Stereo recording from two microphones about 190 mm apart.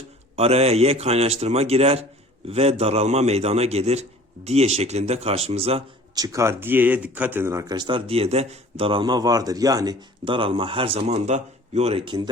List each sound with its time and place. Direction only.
0.3 s a man's voice: 30° right (ahead or behind)
6.1 s speech: 20° right (ahead or behind)